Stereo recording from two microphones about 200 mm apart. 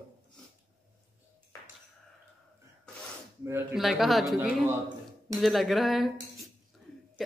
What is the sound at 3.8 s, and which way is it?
A woman's voice, centre (ahead or behind).